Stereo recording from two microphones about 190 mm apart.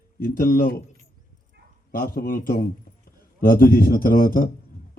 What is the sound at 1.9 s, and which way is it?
A man's voice, 50° left (ahead or behind).